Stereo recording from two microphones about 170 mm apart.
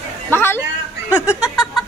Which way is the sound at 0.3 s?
15° left (ahead or behind).